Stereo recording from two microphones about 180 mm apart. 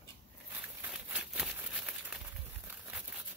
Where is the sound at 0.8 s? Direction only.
5° right (ahead or behind).